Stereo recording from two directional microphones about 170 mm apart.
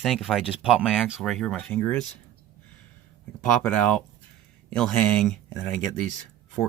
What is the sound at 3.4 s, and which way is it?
Speech, 5° left (ahead or behind).